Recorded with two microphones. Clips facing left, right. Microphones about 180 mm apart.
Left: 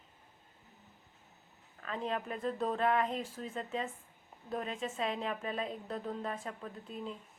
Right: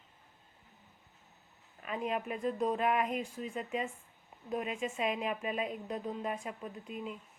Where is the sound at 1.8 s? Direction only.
15° right (ahead or behind).